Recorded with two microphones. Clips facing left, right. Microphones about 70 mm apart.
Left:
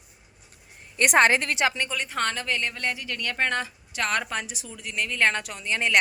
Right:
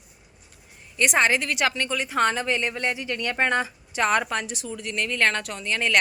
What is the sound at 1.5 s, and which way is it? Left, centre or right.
Speech, left.